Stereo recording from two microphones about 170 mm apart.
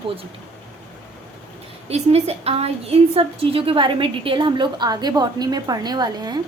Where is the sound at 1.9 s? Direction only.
40° right (ahead or behind).